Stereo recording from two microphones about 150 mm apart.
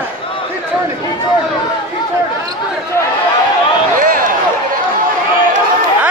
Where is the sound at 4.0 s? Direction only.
65° right (ahead or behind).